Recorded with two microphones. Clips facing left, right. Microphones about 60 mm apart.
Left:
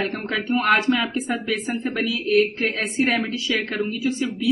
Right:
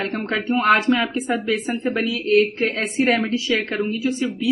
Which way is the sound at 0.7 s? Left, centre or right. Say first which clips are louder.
Right 2 dB; centre.